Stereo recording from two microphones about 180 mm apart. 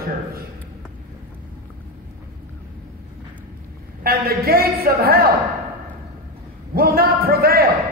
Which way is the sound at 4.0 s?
55° right (ahead or behind).